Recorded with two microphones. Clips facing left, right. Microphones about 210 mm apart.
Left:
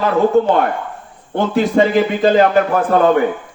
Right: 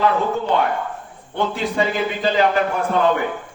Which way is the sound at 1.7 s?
50° left (ahead or behind).